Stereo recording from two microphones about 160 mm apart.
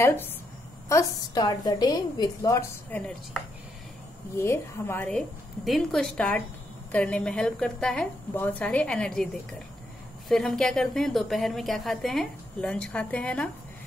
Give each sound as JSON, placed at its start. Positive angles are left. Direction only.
{"t": 0.0, "sound": "a woman's voice", "side_deg": 15}
{"t": 4.4, "sound": "a woman's voice", "side_deg": 15}